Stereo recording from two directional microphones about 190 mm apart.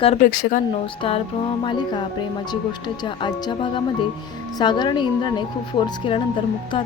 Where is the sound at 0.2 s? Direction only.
50° left (ahead or behind).